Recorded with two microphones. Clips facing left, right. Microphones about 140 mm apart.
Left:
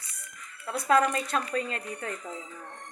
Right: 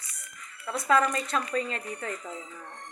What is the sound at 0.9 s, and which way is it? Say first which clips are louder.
Speech: left 1 dB; 50° left (ahead or behind).